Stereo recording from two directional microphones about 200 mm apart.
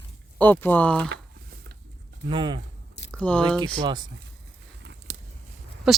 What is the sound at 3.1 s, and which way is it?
Speech, 5° left (ahead or behind).